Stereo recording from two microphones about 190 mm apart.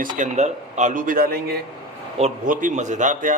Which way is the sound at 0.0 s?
45° right (ahead or behind).